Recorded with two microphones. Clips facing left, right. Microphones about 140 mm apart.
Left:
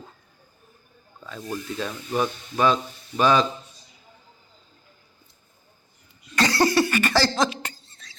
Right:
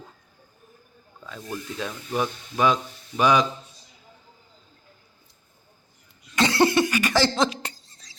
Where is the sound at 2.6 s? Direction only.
15° right (ahead or behind).